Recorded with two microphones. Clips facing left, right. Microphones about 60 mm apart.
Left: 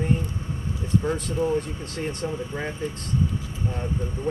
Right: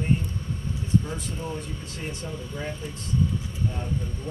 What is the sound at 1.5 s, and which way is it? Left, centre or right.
Speech, left.